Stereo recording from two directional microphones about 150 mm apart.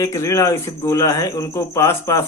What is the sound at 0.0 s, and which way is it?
Speech, 20° left (ahead or behind).